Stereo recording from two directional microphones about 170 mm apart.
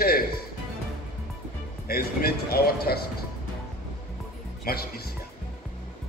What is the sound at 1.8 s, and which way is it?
A man's voice, 65° left (ahead or behind).